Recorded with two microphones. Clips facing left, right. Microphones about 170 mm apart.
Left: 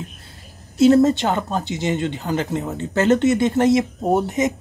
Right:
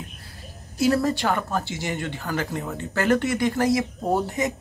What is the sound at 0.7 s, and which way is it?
Speech, 25° left (ahead or behind).